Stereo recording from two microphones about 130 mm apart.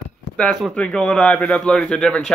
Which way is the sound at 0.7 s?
5° left (ahead or behind).